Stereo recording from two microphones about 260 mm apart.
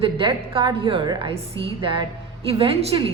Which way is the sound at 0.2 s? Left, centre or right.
Centre.